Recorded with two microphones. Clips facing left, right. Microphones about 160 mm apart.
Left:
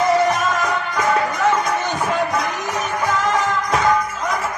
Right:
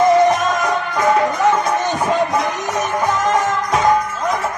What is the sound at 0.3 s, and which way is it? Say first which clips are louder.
Music: right 3 dB; 20° right (ahead or behind).